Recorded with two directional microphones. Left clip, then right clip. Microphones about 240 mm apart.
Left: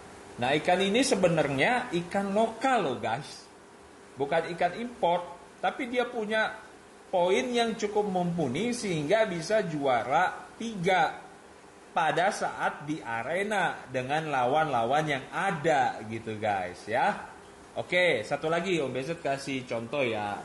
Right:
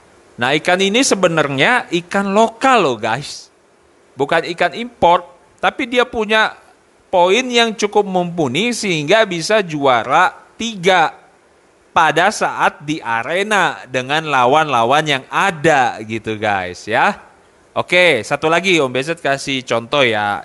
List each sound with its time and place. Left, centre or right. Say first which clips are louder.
0.4 s speech: right 11 dB; right
4.2 s speech: right 12 dB; right